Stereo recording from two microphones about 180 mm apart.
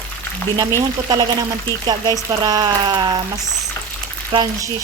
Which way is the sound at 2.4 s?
20° right (ahead or behind).